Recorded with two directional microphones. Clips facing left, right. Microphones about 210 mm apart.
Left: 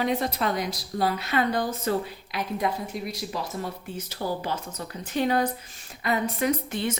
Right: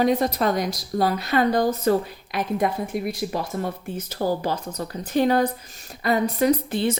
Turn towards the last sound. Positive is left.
turn(degrees=-30)  # may be behind; listen again after turning